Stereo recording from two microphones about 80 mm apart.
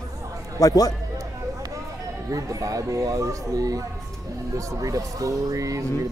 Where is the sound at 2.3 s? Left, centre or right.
Right.